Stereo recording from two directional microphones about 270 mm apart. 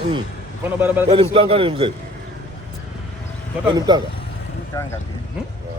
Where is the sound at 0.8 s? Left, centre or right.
Centre.